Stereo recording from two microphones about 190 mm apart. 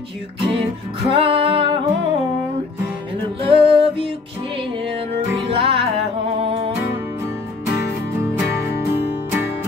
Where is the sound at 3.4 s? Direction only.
30° right (ahead or behind).